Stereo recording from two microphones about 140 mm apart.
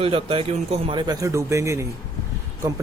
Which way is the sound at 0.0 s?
40° right (ahead or behind).